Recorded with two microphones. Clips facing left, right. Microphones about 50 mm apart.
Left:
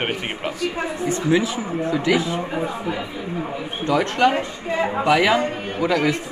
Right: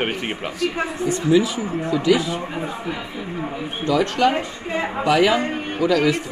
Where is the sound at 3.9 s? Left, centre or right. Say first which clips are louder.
Even; left.